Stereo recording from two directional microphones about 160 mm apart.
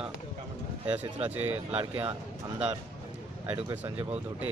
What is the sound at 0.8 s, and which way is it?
Speech, 10° right (ahead or behind).